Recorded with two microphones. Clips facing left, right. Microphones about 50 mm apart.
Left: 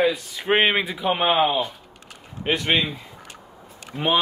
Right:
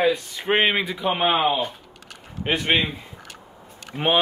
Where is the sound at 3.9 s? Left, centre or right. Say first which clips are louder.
Right 1 dB; centre.